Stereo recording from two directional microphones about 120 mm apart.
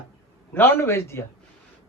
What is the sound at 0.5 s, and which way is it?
Speech, 20° left (ahead or behind).